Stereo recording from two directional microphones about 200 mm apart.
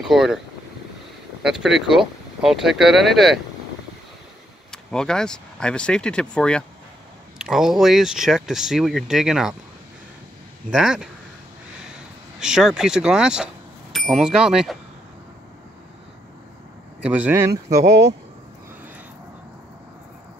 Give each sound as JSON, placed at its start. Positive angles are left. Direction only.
{"t": 0.0, "sound": "speech", "side_deg": 0}
{"t": 1.4, "sound": "speech", "side_deg": 0}
{"t": 4.6, "sound": "speech", "side_deg": 5}
{"t": 10.7, "sound": "speech", "side_deg": -5}
{"t": 17.0, "sound": "speech", "side_deg": -5}